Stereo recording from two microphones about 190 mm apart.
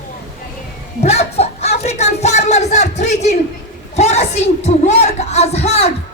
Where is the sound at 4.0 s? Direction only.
35° left (ahead or behind).